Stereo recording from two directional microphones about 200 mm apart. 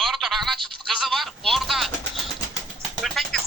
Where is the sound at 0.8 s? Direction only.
Centre (ahead or behind).